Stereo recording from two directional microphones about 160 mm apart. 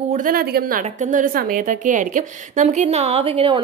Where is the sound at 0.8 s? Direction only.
50° right (ahead or behind).